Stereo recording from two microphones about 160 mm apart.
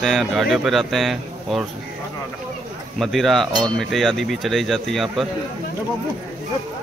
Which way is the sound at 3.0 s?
Centre (ahead or behind).